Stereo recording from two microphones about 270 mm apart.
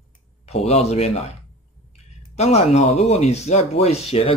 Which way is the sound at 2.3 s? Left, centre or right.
Left.